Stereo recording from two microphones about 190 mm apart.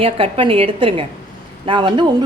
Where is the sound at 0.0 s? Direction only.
30° right (ahead or behind).